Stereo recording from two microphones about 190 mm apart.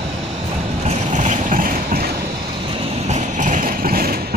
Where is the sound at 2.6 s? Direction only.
30° right (ahead or behind); by 4.3 s 50° right (ahead or behind).